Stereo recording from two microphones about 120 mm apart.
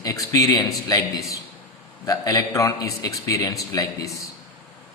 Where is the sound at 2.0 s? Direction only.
30° left (ahead or behind).